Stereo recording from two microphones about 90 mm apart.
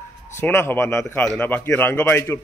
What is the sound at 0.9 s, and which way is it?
A man's voice, 10° left (ahead or behind).